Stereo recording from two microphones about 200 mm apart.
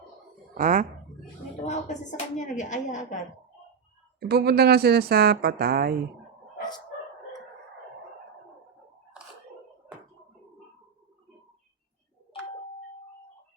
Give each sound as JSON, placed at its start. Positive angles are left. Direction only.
{"t": 0.5, "sound": "speech", "side_deg": -40}
{"t": 1.6, "sound": "speech", "side_deg": 35}
{"t": 4.3, "sound": "a woman's voice", "side_deg": -55}